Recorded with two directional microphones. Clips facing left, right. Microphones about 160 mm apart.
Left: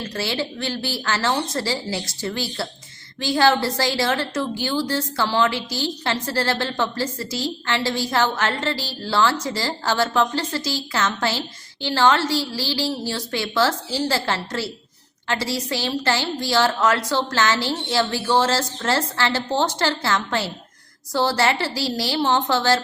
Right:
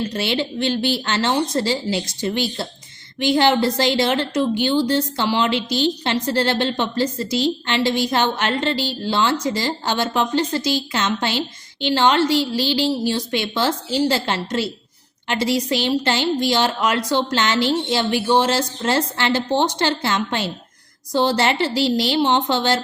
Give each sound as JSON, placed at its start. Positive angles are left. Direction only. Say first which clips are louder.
{"t": 0.1, "sound": "a woman's voice", "louder": "right 3 dB", "side_deg": -20}